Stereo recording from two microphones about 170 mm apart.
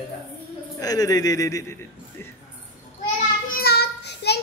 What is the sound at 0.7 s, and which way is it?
Speech, 20° left (ahead or behind).